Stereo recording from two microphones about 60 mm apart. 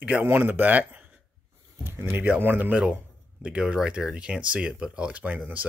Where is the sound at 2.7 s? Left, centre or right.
Right.